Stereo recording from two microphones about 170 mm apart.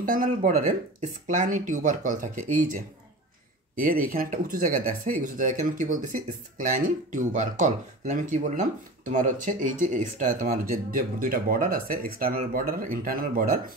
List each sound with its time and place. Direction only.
0.0 s speech: 55° right (ahead or behind)